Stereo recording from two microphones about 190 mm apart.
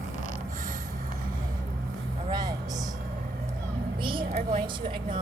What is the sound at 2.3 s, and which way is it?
Vehicle, 20° right (ahead or behind).